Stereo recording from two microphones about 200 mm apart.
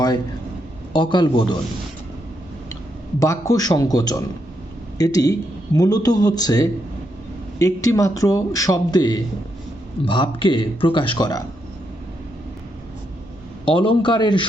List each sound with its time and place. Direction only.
0.9 s speech: 25° left (ahead or behind)
3.2 s a man's voice: 15° left (ahead or behind)
13.7 s speech: 25° left (ahead or behind)